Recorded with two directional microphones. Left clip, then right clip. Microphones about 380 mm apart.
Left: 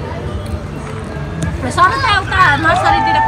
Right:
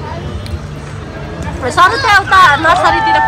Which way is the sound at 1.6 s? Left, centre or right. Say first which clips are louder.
Right 3 dB; centre.